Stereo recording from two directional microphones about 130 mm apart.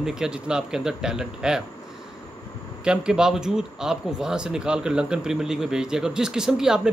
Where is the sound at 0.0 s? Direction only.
5° right (ahead or behind).